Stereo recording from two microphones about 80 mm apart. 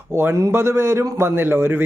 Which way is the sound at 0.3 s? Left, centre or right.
Right.